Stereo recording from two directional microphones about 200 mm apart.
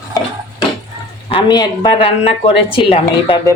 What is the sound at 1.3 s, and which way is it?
A woman's voice, 25° left (ahead or behind).